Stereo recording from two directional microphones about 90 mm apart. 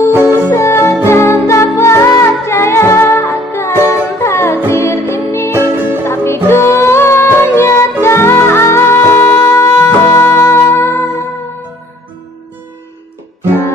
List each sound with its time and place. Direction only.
0.1 s music: 25° right (ahead or behind)
0.5 s music: 30° left (ahead or behind)
5.5 s music: 25° right (ahead or behind)
6.0 s music: 25° left (ahead or behind)